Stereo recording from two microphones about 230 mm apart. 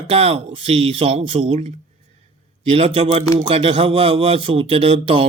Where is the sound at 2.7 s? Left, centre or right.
Right.